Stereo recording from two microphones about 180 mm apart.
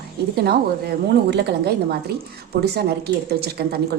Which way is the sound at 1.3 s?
70° right (ahead or behind).